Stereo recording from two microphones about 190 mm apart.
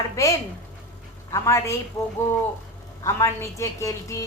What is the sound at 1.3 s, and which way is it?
A woman's voice, 15° left (ahead or behind).